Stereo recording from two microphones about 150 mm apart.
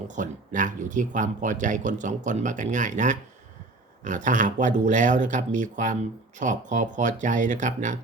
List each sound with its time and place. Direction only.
0.1 s speech: 60° right (ahead or behind)